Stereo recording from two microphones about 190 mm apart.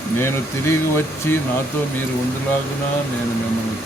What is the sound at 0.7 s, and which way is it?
Speech, 15° left (ahead or behind).